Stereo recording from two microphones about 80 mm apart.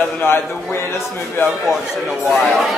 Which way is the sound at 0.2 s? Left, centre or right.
Left.